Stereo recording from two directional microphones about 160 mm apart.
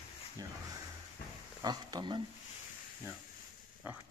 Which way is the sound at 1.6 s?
25° right (ahead or behind).